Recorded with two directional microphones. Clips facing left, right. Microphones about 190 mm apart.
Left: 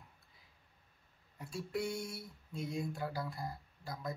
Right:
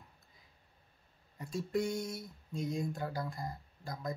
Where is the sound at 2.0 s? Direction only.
40° right (ahead or behind).